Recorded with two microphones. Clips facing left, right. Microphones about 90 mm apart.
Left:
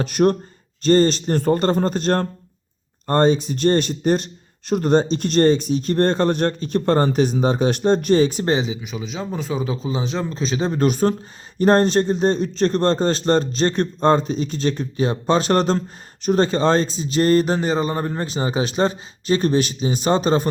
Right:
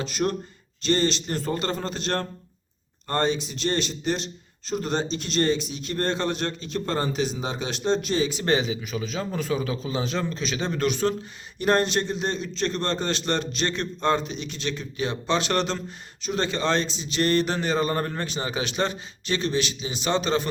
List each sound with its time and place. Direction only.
0.0 s speech: 55° left (ahead or behind)
8.4 s a man's voice: 25° left (ahead or behind)
18.2 s a man's voice: 30° left (ahead or behind)